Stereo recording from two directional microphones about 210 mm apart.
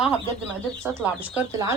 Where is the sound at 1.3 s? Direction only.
15° right (ahead or behind).